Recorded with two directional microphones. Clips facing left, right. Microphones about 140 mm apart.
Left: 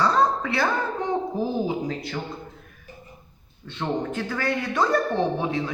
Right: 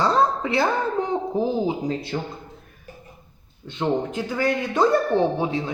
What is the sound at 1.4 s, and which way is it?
Speech, 25° right (ahead or behind).